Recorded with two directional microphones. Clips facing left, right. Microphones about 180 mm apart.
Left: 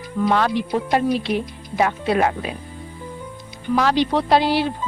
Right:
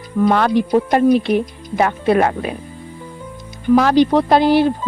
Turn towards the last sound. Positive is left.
turn(degrees=-50)  # may be behind; listen again after turning